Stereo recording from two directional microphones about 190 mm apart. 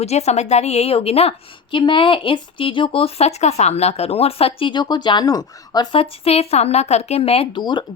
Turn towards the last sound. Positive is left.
turn(degrees=25)  # may be behind; listen again after turning